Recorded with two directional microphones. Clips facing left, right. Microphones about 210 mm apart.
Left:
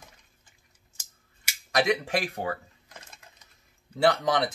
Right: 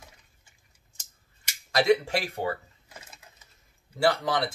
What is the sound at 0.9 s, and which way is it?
Scissors, 10° left (ahead or behind).